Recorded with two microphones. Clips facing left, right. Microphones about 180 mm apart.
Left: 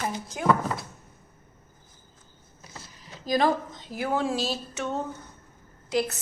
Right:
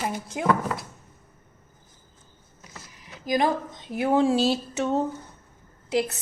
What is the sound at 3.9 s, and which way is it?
Speech, 25° right (ahead or behind).